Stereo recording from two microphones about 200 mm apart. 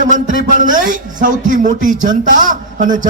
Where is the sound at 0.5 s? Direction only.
40° right (ahead or behind).